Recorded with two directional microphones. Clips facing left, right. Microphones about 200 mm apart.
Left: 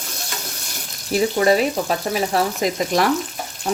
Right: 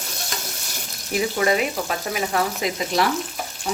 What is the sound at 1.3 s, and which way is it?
Speech, 35° left (ahead or behind).